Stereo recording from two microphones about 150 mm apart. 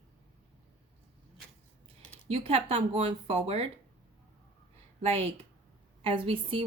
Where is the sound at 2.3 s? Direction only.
40° right (ahead or behind).